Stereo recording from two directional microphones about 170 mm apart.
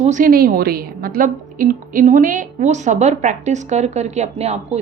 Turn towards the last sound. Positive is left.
turn(degrees=-40)  # may be behind; listen again after turning